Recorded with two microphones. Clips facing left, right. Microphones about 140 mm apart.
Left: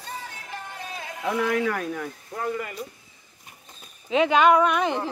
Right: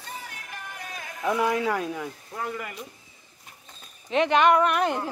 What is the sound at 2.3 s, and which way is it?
Speech, centre (ahead or behind).